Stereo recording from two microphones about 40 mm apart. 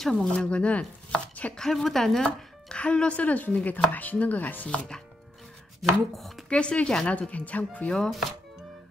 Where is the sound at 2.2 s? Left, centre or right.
Left.